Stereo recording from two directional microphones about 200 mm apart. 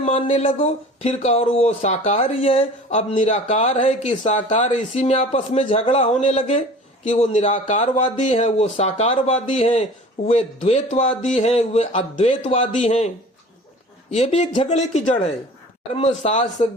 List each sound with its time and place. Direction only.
0.0 s speech: 30° left (ahead or behind)
14.1 s speech: 35° left (ahead or behind)